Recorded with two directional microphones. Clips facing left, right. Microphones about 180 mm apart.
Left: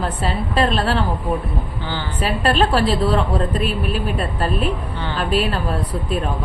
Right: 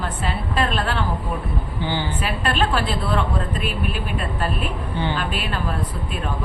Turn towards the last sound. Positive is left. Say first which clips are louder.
# left 5 dB
turn(degrees=35)  # may be behind; listen again after turning